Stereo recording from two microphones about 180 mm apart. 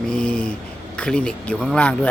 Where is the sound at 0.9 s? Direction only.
5° left (ahead or behind).